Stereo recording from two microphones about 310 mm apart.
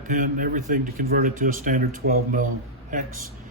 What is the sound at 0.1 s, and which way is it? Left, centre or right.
Speech, right.